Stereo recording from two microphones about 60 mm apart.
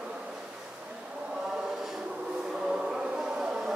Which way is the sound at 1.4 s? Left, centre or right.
Centre.